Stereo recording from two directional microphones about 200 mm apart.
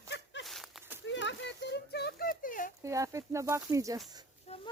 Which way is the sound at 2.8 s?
15° right (ahead or behind).